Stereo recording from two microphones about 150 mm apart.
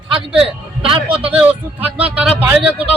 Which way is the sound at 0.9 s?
40° right (ahead or behind).